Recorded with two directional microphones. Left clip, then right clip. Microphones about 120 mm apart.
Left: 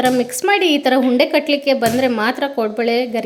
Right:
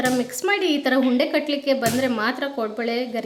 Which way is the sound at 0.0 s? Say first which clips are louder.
Left 6 dB; 35° left (ahead or behind).